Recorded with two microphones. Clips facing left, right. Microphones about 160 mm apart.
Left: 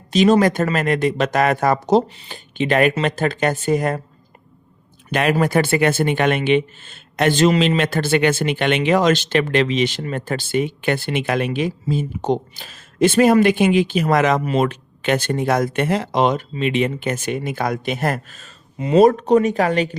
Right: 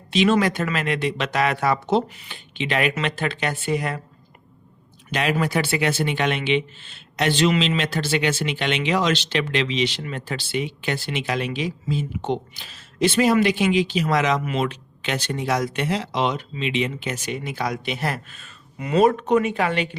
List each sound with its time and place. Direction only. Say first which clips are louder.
0.1 s speech: left 5 dB; 40° left (ahead or behind)
5.1 s speech: left 5 dB; 50° left (ahead or behind)
7.8 s speech: left 6 dB; 50° left (ahead or behind)
18.8 s speech: left 5 dB; 30° left (ahead or behind)